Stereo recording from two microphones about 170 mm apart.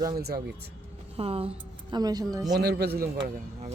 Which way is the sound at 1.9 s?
20° right (ahead or behind).